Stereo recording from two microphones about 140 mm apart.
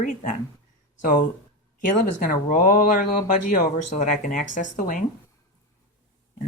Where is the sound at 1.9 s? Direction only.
80° left.